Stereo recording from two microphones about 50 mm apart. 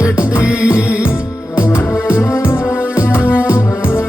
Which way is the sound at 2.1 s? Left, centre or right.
Left.